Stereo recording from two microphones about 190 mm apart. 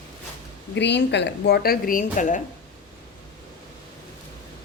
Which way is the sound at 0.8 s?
65° left (ahead or behind).